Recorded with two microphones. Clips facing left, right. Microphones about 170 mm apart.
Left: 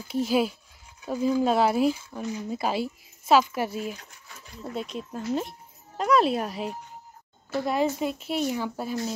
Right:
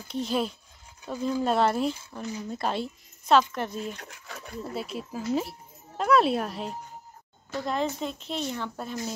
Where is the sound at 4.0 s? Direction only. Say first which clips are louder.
Right 7 dB; 80° right.